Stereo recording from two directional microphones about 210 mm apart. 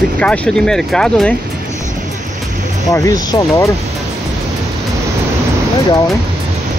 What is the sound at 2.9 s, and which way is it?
Speech, 15° left (ahead or behind).